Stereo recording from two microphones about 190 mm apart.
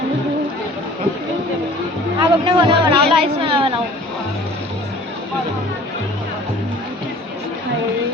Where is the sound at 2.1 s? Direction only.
25° right (ahead or behind).